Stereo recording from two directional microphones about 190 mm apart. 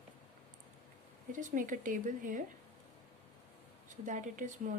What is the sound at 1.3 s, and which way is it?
Speech, 45° right (ahead or behind).